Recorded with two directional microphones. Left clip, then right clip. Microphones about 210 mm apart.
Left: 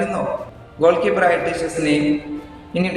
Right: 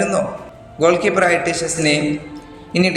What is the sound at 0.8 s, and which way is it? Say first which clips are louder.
A man's voice: right 1 dB; 40° right (ahead or behind).